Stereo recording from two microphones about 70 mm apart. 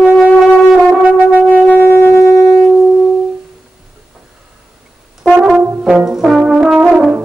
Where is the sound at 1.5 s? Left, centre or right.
Left.